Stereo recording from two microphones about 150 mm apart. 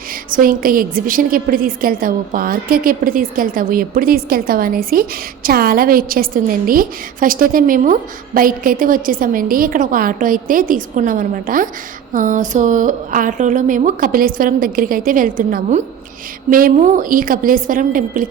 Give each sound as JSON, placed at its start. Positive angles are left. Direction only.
{"t": 0.3, "sound": "a woman's voice", "side_deg": -70}